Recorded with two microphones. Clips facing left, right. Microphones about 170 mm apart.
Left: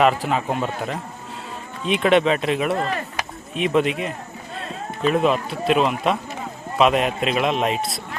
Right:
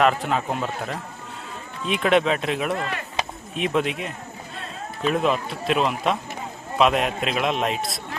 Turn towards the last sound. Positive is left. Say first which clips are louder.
# left 2 dB
turn(degrees=0)  # may be behind; listen again after turning